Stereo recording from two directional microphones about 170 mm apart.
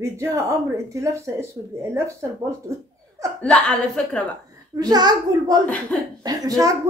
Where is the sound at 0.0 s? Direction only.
15° right (ahead or behind).